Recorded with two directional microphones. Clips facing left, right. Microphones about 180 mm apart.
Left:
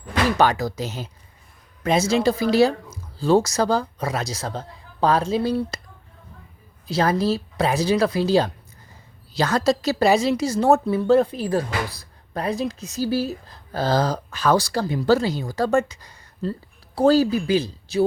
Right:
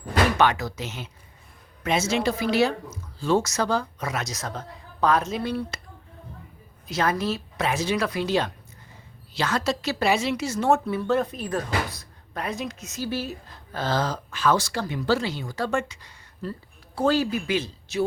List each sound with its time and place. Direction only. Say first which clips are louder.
0.3 s a woman's voice: left 3 dB; 35° left (ahead or behind)
6.8 s a woman's voice: left 5 dB; 35° left (ahead or behind)